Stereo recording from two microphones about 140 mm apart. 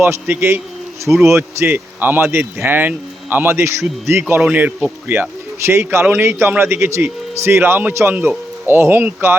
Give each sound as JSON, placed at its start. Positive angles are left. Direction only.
{"t": 0.0, "sound": "a man's voice", "side_deg": -15}